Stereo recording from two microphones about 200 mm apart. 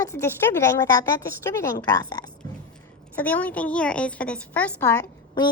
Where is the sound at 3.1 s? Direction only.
10° left (ahead or behind).